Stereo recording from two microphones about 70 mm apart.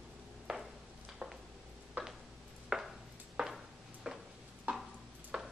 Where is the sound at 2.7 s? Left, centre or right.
Centre.